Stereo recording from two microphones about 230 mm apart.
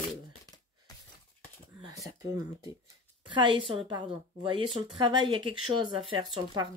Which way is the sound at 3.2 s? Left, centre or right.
Right.